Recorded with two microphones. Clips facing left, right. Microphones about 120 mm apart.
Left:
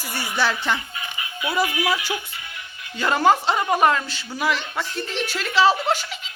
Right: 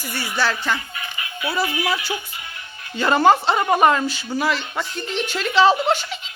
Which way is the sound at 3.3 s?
5° left (ahead or behind).